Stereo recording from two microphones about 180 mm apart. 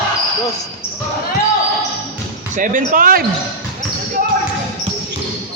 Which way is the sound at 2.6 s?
50° right (ahead or behind).